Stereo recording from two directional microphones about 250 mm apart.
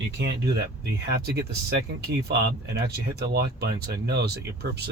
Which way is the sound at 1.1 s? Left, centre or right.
Right.